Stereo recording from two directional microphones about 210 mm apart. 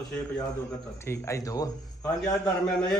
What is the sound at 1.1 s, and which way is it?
Speech, 15° left (ahead or behind).